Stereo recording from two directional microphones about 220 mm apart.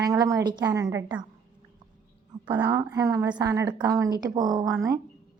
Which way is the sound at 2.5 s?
15° right (ahead or behind).